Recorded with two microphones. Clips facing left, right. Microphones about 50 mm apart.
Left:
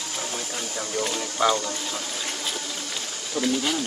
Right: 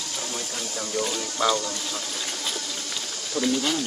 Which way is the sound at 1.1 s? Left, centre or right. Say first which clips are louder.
Left 3 dB; centre.